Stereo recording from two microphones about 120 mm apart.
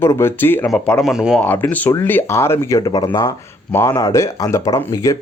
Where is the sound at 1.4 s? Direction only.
15° left (ahead or behind).